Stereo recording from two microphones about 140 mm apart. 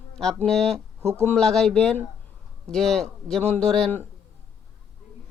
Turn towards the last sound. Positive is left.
turn(degrees=10)  # may be behind; listen again after turning